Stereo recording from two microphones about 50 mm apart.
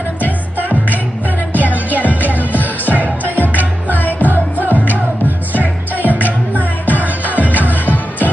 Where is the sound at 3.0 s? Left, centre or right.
Left.